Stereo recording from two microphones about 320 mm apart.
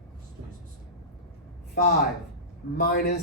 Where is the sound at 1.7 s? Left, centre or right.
Left.